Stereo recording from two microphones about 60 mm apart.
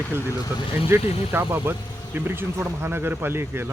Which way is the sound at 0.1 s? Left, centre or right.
Right.